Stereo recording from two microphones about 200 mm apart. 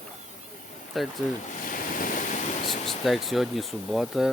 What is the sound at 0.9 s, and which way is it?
Speech, centre (ahead or behind).